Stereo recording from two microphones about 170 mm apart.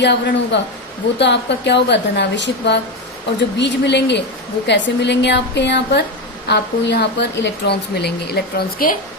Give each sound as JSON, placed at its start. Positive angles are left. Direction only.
{"t": 0.0, "sound": "a woman's voice", "side_deg": 90}